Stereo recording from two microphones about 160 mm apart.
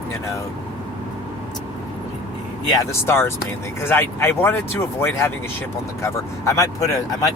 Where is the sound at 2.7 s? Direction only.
20° left (ahead or behind).